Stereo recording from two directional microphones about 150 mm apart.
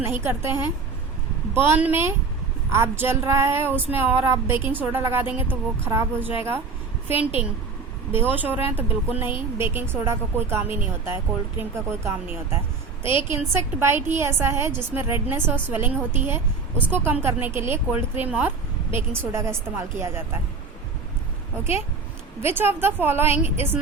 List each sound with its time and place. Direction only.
0.0 s a woman's voice: 15° right (ahead or behind)
22.4 s a woman's voice: 15° right (ahead or behind)